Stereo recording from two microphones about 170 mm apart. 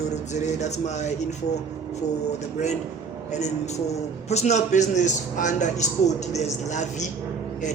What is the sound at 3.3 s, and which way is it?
A man's voice, 40° left (ahead or behind).